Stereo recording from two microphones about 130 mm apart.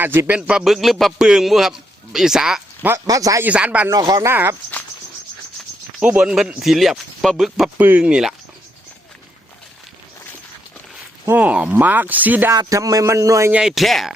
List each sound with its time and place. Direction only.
0.0 s speech: 15° right (ahead or behind)
3.1 s speech: 25° right (ahead or behind)
3.4 s speech: 10° right (ahead or behind)
3.8 s speech: 30° right (ahead or behind)
6.0 s speech: 10° right (ahead or behind)
7.8 s speech: 15° right (ahead or behind)
11.3 s speech: 10° right (ahead or behind)
12.5 s speech: 25° right (ahead or behind)
13.5 s speech: 5° right (ahead or behind)